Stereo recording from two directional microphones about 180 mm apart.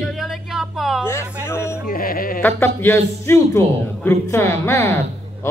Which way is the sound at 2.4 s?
10° left (ahead or behind).